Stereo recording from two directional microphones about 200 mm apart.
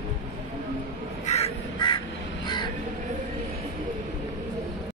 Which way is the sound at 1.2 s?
30° left (ahead or behind).